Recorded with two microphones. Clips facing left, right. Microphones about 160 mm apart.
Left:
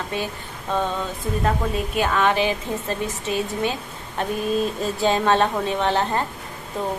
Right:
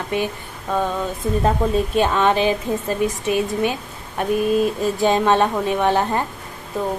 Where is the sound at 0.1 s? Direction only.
15° right (ahead or behind).